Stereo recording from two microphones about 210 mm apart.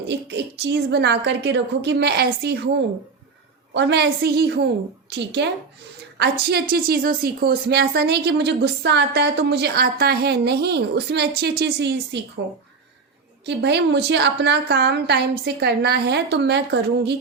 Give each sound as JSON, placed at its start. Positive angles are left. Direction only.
{"t": 0.1, "sound": "a woman's voice", "side_deg": -55}
{"t": 3.8, "sound": "a woman's voice", "side_deg": -55}
{"t": 6.5, "sound": "a woman's voice", "side_deg": -45}
{"t": 13.4, "sound": "a woman's voice", "side_deg": -55}